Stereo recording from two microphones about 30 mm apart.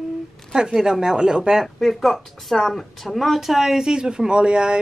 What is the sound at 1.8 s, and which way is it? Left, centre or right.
Speech, centre.